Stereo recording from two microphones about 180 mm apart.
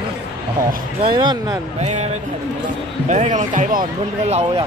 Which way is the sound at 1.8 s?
40° right (ahead or behind).